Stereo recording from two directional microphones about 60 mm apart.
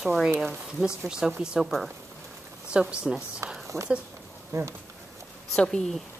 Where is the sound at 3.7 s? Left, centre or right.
Right.